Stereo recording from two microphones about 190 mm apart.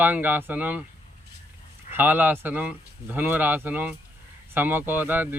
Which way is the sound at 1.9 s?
10° right (ahead or behind).